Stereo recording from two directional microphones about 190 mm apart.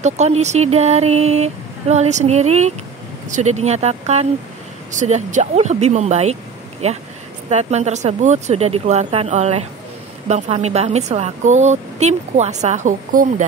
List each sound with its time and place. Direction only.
0.0 s a woman's voice: 35° right (ahead or behind)